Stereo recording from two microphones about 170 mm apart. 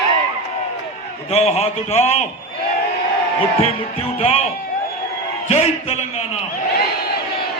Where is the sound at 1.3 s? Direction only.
40° left (ahead or behind).